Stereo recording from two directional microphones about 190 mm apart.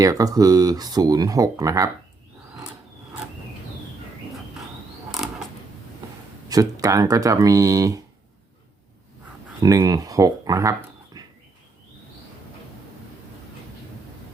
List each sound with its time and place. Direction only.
0.0 s speech: 20° right (ahead or behind)
6.5 s speech: 20° right (ahead or behind)
9.6 s speech: 20° right (ahead or behind)
11.1 s a sound: 20° right (ahead or behind)